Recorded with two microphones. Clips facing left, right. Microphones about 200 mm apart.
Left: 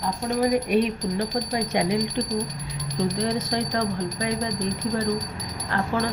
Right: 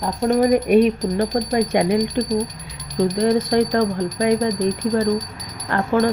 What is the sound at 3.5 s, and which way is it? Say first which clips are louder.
Speech: right 8 dB; 55° right (ahead or behind).